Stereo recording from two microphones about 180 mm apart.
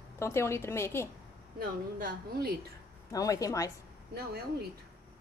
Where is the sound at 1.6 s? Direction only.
55° right (ahead or behind).